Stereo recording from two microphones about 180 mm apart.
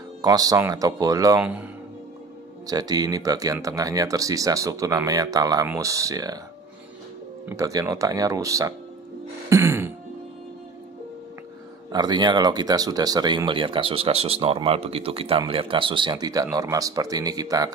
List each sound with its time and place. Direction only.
0.2 s speech: 20° right (ahead or behind)
1.4 s speech: 5° right (ahead or behind)
2.6 s speech: 20° right (ahead or behind)
7.4 s speech: 20° right (ahead or behind)
9.5 s music: 15° right (ahead or behind)
11.9 s speech: 25° right (ahead or behind)